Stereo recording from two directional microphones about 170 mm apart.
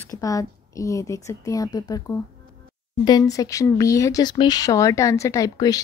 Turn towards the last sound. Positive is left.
turn(degrees=20)  # may be behind; listen again after turning